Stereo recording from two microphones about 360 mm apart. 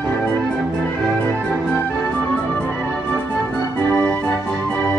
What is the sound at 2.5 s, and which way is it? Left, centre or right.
Music, centre.